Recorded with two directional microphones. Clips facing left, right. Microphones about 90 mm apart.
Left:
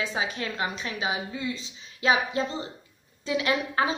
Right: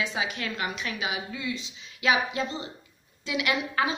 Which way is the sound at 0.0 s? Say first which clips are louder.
Left 1 dB; 35° left (ahead or behind).